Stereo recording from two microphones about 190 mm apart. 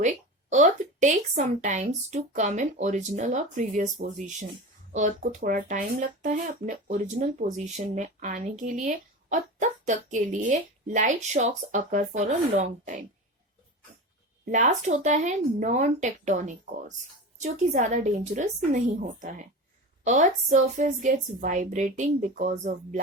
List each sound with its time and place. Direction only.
0.0 s speech: 40° right (ahead or behind)
14.5 s speech: 40° right (ahead or behind)